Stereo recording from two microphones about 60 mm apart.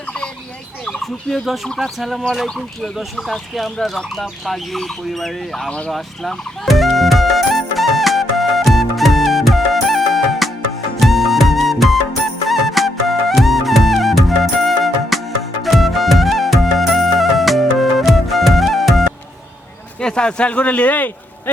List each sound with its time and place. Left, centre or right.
0.9 s speech: centre
5.9 s music: centre
20.0 s speech: centre